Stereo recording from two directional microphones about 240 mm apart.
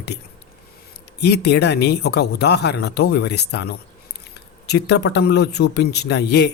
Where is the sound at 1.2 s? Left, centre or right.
Left.